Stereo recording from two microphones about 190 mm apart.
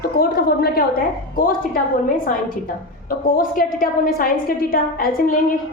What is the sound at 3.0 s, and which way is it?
A woman's voice, 50° left (ahead or behind).